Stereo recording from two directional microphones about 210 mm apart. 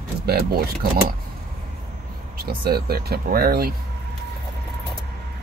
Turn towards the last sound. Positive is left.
turn(degrees=-45)  # may be behind; listen again after turning